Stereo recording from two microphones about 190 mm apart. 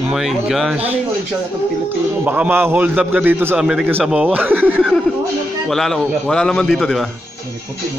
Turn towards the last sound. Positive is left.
turn(degrees=0)  # may be behind; listen again after turning